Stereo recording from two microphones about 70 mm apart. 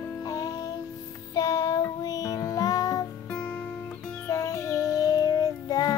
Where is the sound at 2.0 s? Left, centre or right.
Left.